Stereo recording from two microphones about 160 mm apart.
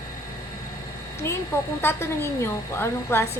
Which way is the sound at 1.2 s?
15° left (ahead or behind).